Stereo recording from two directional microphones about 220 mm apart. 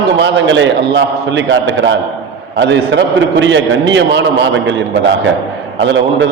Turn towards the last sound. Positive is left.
turn(degrees=-55)  # may be behind; listen again after turning